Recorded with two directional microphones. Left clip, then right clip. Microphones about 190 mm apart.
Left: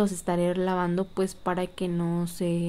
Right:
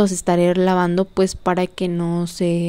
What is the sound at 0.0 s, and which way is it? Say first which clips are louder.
A woman's voice: right 9 dB; 35° right (ahead or behind).